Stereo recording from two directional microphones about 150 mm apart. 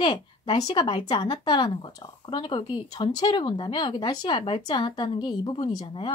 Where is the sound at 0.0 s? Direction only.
35° left (ahead or behind).